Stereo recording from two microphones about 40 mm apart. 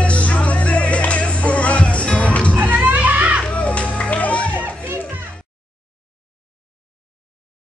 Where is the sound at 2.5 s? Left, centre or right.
Right.